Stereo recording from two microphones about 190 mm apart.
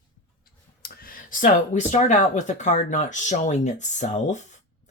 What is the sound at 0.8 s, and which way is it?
Speech, 50° left (ahead or behind).